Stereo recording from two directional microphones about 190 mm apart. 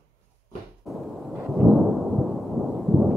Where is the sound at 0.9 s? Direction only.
Centre (ahead or behind).